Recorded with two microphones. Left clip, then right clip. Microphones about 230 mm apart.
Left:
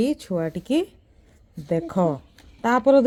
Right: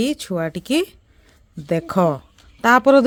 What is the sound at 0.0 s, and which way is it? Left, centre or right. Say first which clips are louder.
Speech: right 2 dB; right.